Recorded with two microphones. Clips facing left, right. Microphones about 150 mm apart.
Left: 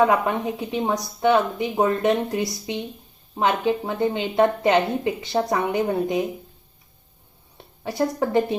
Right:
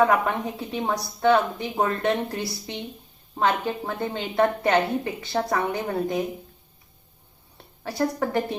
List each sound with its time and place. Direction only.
0.0 s a woman's voice: 20° left (ahead or behind)
7.9 s a woman's voice: 20° left (ahead or behind)